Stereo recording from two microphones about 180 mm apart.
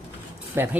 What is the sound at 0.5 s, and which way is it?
Speech, 15° right (ahead or behind).